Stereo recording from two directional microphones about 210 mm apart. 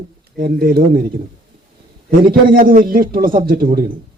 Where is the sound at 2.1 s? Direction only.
40° right (ahead or behind).